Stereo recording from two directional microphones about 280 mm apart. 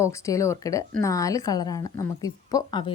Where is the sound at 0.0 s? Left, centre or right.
Centre.